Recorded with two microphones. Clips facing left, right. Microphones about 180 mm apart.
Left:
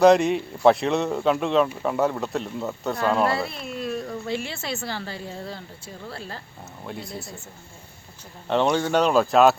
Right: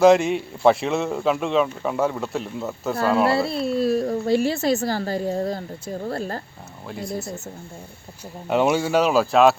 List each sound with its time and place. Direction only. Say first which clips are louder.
0.0 s a man's voice: right 1 dB; centre (ahead or behind)
3.3 s a woman's voice: right 8 dB; 30° right (ahead or behind)
6.8 s a man's voice: right 5 dB; centre (ahead or behind)
8.4 s a man's voice: right 2 dB; 10° right (ahead or behind)